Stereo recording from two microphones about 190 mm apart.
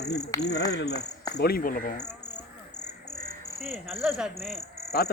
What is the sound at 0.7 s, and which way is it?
Speech, 60° left (ahead or behind).